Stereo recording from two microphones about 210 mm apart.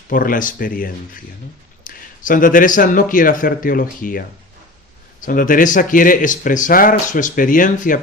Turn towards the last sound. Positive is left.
turn(degrees=40)  # may be behind; listen again after turning